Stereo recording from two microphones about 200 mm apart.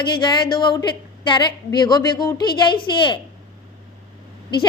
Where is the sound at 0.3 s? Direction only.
20° left (ahead or behind).